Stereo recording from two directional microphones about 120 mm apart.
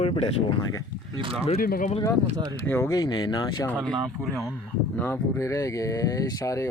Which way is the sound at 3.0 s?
35° left (ahead or behind).